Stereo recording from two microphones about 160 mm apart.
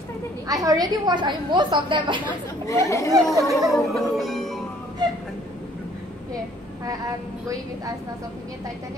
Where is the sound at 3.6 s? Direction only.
Centre (ahead or behind).